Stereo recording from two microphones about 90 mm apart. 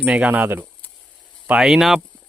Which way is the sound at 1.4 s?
10° right (ahead or behind).